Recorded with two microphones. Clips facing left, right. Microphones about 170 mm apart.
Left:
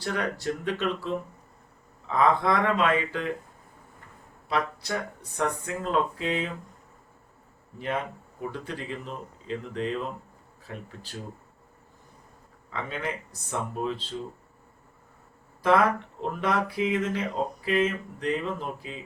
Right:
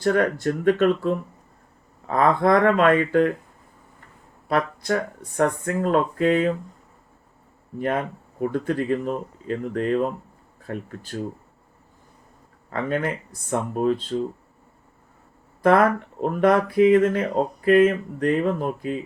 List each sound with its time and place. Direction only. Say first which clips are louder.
0.0 s speech: right 9 dB; 50° right (ahead or behind)
4.4 s speech: right 6 dB; 50° right (ahead or behind)
7.8 s speech: right 6 dB; 50° right (ahead or behind)
12.7 s speech: right 8 dB; 55° right (ahead or behind)
15.6 s speech: right 5 dB; 50° right (ahead or behind)